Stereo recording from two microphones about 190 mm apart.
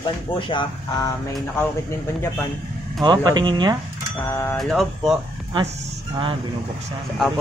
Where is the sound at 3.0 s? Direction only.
20° right (ahead or behind).